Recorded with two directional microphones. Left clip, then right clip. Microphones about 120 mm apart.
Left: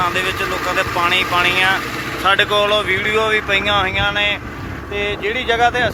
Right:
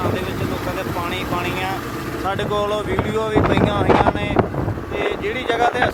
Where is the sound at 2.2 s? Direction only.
20° right (ahead or behind).